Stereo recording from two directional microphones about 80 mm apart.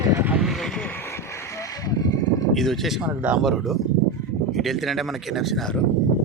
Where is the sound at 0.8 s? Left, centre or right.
Left.